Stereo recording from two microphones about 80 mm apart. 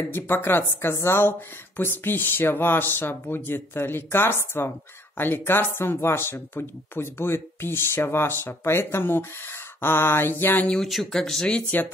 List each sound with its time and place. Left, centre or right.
0.1 s speech: left
10.7 s speech: centre